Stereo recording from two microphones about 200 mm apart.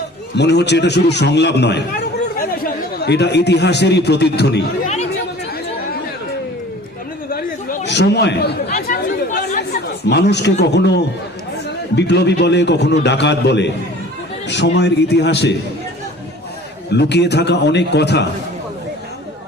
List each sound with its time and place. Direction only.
0.3 s a man's voice: 60° left (ahead or behind)
2.4 s speech: 45° left (ahead or behind)
7.3 s a sound: 45° left (ahead or behind)
7.9 s chatter: 60° left (ahead or behind)
11.9 s a man's voice: 60° left (ahead or behind)
16.9 s a man's voice: 55° left (ahead or behind)